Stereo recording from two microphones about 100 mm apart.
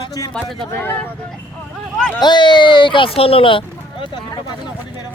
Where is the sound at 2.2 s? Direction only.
50° left (ahead or behind).